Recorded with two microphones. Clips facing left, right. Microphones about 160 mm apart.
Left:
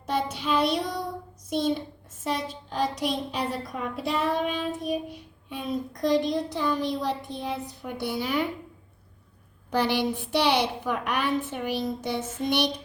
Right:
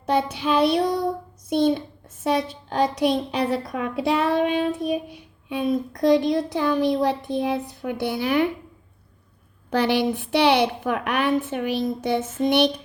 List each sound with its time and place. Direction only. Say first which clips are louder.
0.0 s a woman's voice: right 6 dB; 65° right (ahead or behind)
6.1 s a woman's voice: right 5 dB; 75° right (ahead or behind)
9.6 s a woman's voice: right 4 dB; 60° right (ahead or behind)